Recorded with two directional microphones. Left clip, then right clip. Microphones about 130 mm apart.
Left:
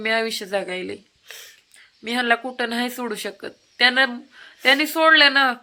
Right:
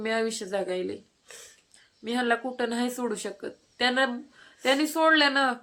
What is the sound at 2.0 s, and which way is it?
Speech, 20° left (ahead or behind).